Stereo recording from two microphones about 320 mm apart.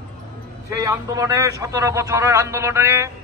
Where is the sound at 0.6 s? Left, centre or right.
Centre.